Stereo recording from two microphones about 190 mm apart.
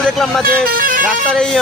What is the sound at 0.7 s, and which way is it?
Vehicle, 50° right (ahead or behind).